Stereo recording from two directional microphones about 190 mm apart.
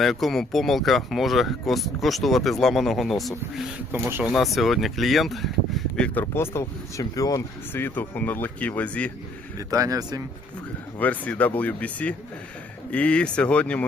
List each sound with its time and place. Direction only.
0.0 s speech: centre (ahead or behind)
3.9 s speech: 10° right (ahead or behind)
4.3 s speech: centre (ahead or behind)
9.6 s speech: 20° right (ahead or behind)
11.0 s speech: 10° left (ahead or behind)